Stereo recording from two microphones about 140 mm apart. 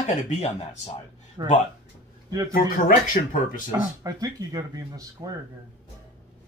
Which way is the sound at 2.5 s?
85° left.